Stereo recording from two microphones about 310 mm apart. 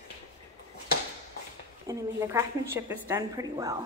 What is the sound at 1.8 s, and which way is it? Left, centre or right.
A woman's voice, centre.